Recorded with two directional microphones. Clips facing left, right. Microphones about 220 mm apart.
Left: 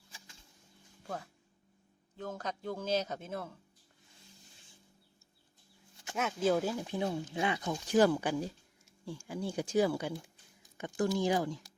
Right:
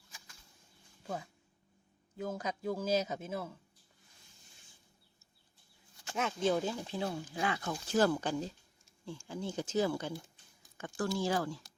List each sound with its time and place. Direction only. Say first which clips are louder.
1.0 s a man's voice: right 1 dB; 5° right (ahead or behind)
6.1 s speech: left 2 dB; 5° left (ahead or behind)